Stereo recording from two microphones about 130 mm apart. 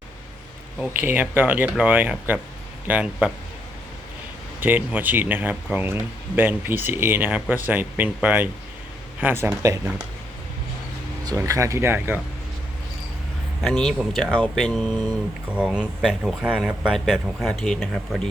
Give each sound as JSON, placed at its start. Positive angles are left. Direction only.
{"t": 1.0, "sound": "speech", "side_deg": -15}
{"t": 4.6, "sound": "speech", "side_deg": -15}
{"t": 11.3, "sound": "speech", "side_deg": -25}
{"t": 13.6, "sound": "speech", "side_deg": 5}